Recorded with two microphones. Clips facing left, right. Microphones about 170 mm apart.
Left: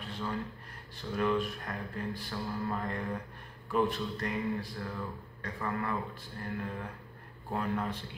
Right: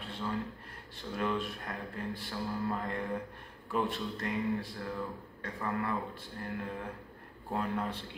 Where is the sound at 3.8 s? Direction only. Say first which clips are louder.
Left 1 dB; 25° right (ahead or behind).